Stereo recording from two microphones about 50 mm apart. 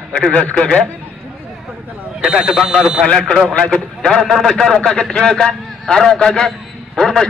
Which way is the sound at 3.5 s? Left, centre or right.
Centre.